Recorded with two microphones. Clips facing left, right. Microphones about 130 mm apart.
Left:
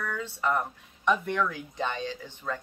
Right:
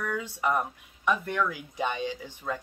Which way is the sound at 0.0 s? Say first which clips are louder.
Right 1 dB; 10° right (ahead or behind).